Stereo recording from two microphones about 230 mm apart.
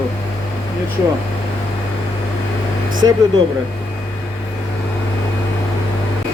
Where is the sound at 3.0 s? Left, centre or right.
Centre.